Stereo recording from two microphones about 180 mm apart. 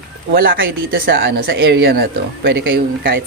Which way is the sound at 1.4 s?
60° right (ahead or behind).